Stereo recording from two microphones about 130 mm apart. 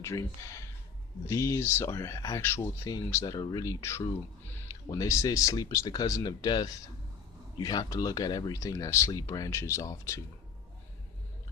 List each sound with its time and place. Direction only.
0.0 s speech: 20° left (ahead or behind)
1.3 s speech: 25° left (ahead or behind)